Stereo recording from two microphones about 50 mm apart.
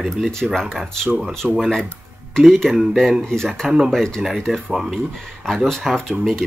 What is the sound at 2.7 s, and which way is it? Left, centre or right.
Speech, centre.